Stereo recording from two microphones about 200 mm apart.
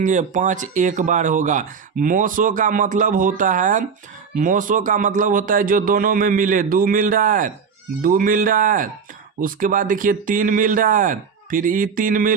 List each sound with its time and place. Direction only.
0.0 s a man's voice: 40° right (ahead or behind)